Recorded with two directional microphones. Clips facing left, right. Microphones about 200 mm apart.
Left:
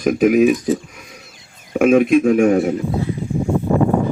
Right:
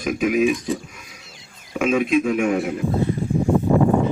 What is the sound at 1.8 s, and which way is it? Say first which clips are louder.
Speech: left 6 dB; 55° left (ahead or behind).